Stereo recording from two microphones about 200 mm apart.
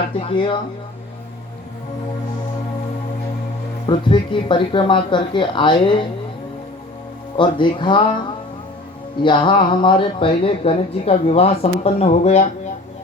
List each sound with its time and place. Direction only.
0.2 s speech: 25° left (ahead or behind)
3.8 s speech: 25° left (ahead or behind)
7.3 s speech: 25° left (ahead or behind)
9.2 s speech: 25° left (ahead or behind)